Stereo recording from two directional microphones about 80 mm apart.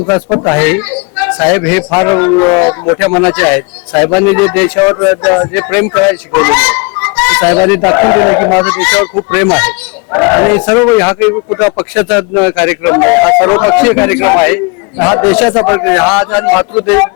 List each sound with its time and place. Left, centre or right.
0.1 s speech: left